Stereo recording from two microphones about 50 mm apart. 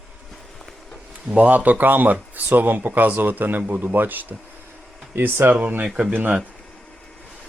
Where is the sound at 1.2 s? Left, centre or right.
Right.